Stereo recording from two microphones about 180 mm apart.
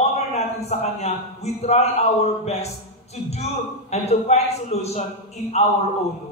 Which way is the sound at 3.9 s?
35° left (ahead or behind).